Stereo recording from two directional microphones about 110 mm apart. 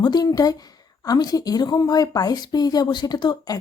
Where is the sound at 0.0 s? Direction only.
40° left (ahead or behind).